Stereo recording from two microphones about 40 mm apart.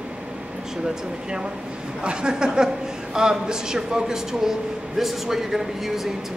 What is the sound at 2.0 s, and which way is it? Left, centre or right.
Speech, right.